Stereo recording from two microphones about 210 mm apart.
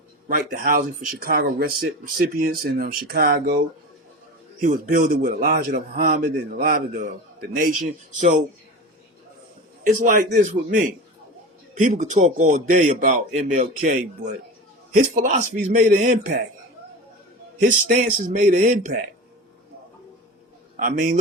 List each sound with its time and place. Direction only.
0.3 s speech: 40° right (ahead or behind)
4.6 s speech: 40° right (ahead or behind)
9.8 s speech: 35° right (ahead or behind)
11.8 s speech: 35° right (ahead or behind)
17.6 s speech: 40° right (ahead or behind)
20.7 s speech: 40° right (ahead or behind)